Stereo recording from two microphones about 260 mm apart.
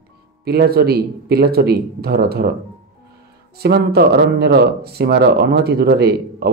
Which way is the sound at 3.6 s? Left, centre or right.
Right.